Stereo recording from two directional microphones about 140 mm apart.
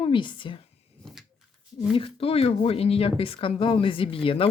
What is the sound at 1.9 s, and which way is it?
Speech, 40° left (ahead or behind).